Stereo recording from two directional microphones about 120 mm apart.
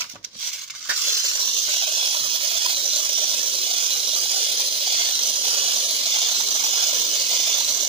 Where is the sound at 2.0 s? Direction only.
50° right (ahead or behind).